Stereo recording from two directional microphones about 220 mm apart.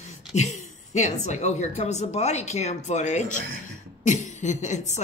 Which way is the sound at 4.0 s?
35° left (ahead or behind).